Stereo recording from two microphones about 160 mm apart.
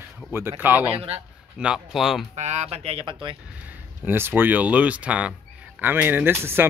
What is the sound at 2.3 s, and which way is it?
Speech, 45° right (ahead or behind).